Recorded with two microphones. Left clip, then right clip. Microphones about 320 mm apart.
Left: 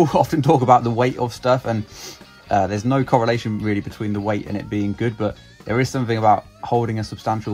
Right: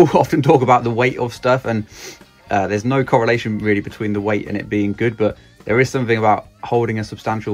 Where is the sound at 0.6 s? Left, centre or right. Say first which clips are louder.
Right 1 dB; centre.